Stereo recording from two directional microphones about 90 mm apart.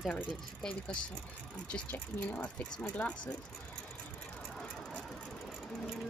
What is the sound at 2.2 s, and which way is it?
Speech, 15° left (ahead or behind).